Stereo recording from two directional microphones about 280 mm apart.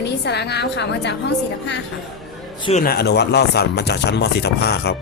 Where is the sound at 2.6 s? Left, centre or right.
Left.